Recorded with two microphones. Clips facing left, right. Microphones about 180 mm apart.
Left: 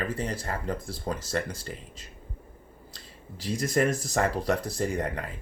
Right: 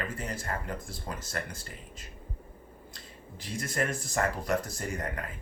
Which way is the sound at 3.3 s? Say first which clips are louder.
Left 8 dB; 35° left (ahead or behind).